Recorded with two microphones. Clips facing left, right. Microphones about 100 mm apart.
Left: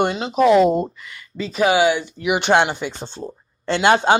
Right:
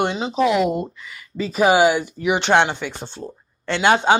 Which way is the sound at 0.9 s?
Centre (ahead or behind).